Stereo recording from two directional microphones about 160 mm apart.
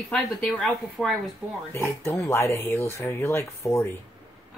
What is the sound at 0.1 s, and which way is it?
A woman's voice, centre (ahead or behind).